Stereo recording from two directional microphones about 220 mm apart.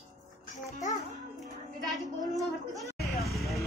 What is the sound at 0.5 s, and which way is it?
Speech, 35° left (ahead or behind).